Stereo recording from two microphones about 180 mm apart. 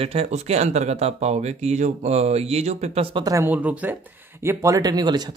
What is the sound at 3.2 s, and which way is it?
Speech, 15° right (ahead or behind).